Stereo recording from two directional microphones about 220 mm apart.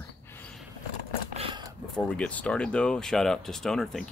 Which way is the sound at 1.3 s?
25° right (ahead or behind).